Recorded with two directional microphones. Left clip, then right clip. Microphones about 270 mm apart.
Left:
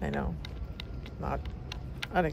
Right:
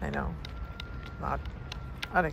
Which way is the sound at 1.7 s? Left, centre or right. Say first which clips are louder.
Right 2 dB; centre.